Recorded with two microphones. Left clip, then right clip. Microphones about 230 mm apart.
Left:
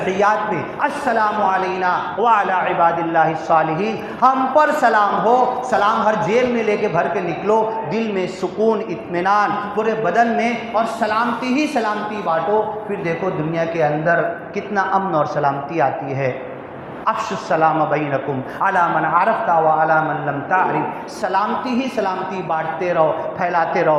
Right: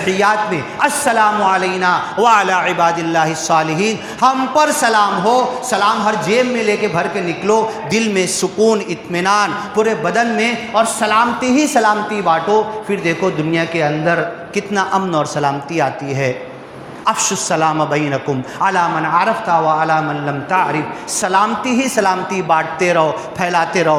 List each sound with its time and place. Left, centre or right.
0.1 s a woman's voice: right
21.2 s a man's voice: right